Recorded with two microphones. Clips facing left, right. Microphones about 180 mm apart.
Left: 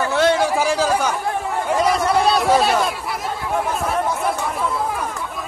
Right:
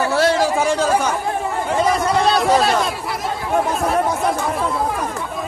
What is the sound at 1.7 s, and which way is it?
Chatter, 5° left (ahead or behind).